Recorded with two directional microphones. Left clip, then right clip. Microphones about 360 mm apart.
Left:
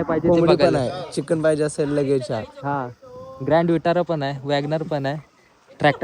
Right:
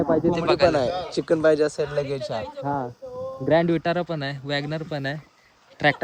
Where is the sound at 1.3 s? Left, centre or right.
Centre.